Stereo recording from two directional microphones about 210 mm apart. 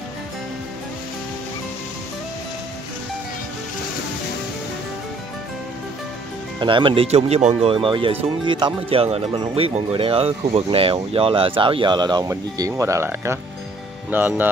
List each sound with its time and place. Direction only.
6.6 s speech: 25° right (ahead or behind)